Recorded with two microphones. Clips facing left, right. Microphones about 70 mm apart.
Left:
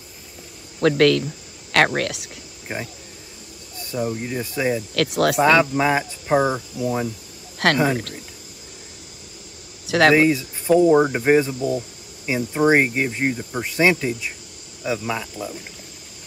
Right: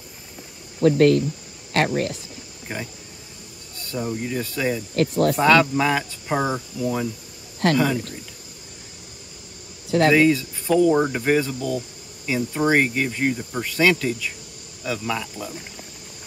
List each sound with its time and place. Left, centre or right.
0.8 s speech: left
2.7 s speech: left
3.8 s speech: centre
4.9 s speech: left
5.4 s speech: centre
6.2 s speech: centre
7.5 s speech: left
9.8 s speech: left
10.1 s speech: left
13.4 s speech: centre
13.7 s speech: left